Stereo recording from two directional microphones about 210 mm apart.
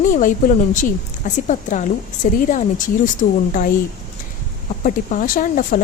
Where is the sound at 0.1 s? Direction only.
40° left (ahead or behind).